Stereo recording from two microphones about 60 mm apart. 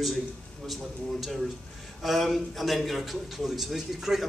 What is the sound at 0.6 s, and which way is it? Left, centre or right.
A man's voice, centre.